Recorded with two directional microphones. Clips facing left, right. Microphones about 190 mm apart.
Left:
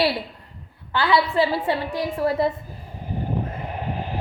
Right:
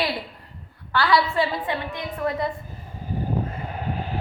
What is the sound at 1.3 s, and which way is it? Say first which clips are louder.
A woman's voice: left 4 dB; 30° left (ahead or behind).